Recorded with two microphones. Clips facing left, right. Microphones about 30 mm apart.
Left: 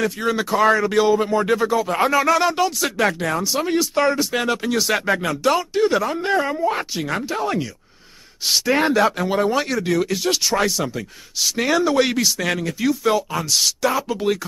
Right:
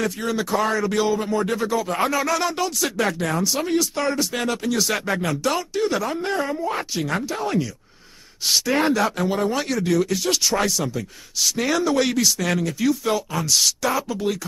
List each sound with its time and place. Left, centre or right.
0.0 s speech: centre
7.0 s speech: centre
8.9 s speech: centre
14.0 s speech: left